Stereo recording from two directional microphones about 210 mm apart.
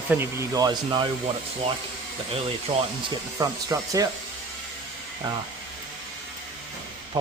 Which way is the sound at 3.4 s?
15° right (ahead or behind).